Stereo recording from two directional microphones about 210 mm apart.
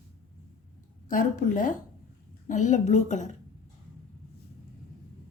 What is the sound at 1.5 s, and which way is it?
Speech, 40° left (ahead or behind).